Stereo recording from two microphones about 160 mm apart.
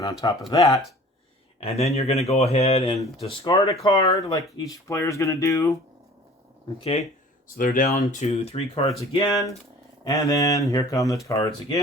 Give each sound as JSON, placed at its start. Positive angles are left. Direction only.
{"t": 0.0, "sound": "speech", "side_deg": 20}
{"t": 1.6, "sound": "speech", "side_deg": 40}
{"t": 3.8, "sound": "speech", "side_deg": 20}
{"t": 6.7, "sound": "speech", "side_deg": 40}
{"t": 7.4, "sound": "speech", "side_deg": 55}
{"t": 10.0, "sound": "speech", "side_deg": 20}